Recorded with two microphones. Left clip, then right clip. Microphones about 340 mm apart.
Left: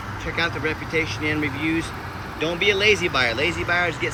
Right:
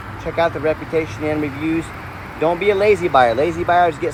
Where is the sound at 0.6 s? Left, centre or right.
Right.